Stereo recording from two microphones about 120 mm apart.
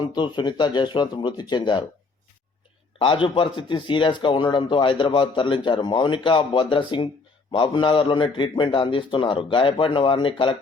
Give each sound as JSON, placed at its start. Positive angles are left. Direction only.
{"t": 0.0, "sound": "speech", "side_deg": 40}
{"t": 3.0, "sound": "speech", "side_deg": 45}